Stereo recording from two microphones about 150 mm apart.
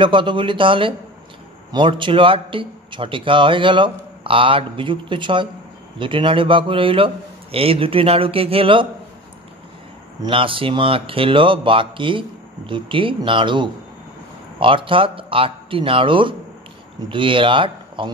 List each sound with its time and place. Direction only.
0.0 s a man's voice: 35° right (ahead or behind)
10.2 s a man's voice: 35° right (ahead or behind)